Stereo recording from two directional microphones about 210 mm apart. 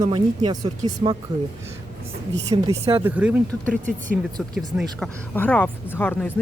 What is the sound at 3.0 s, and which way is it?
Speech, 10° right (ahead or behind).